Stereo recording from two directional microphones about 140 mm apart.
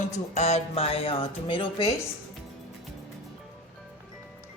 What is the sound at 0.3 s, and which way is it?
Speech, 50° left (ahead or behind).